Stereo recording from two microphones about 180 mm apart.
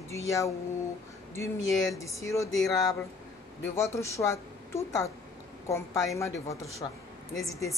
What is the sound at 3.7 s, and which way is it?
Speech, 15° left (ahead or behind).